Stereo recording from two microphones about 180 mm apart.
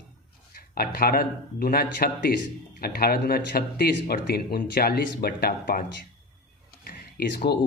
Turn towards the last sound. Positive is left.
turn(degrees=60)  # may be behind; listen again after turning